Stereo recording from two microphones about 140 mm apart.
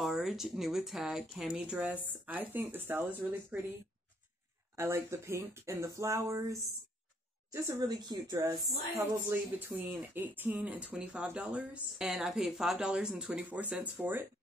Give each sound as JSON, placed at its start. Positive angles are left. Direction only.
{"t": 0.0, "sound": "speech", "side_deg": 0}
{"t": 4.7, "sound": "speech", "side_deg": -20}